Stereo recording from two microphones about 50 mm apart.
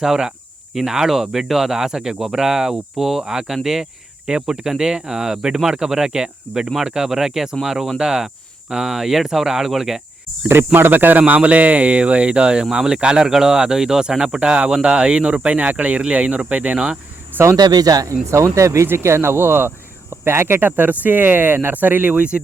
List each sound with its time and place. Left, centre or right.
0.0 s speech: centre
10.8 s speech: right
11.3 s speech: right
17.3 s speech: right
18.0 s speech: right
18.9 s speech: right